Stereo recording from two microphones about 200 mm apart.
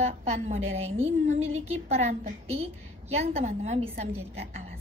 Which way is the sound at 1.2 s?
35° right (ahead or behind).